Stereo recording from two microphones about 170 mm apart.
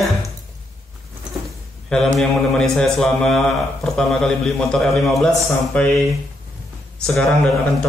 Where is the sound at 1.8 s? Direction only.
5° left (ahead or behind).